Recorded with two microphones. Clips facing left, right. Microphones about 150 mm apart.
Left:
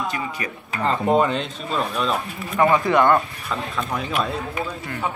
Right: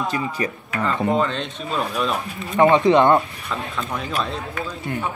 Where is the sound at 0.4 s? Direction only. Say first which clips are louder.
Right 6 dB; 30° right (ahead or behind).